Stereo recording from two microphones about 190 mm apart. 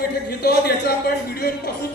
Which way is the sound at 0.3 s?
55° left (ahead or behind).